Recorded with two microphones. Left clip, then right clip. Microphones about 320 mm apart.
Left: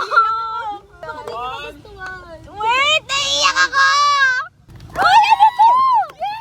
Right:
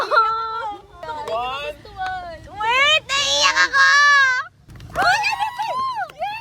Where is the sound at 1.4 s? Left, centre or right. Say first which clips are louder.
Right 1 dB; centre.